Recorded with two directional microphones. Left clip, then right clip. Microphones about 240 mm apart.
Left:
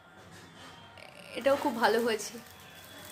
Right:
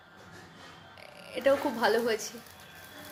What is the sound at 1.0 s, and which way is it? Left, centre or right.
Speech, centre.